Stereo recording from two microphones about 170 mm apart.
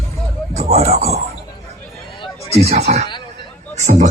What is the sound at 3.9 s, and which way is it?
Music, 45° right (ahead or behind).